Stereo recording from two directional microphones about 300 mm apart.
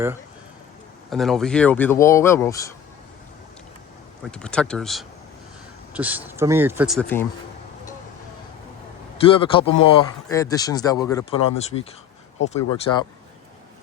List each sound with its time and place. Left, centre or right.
1.1 s speech: centre
4.2 s speech: centre
9.1 s speech: centre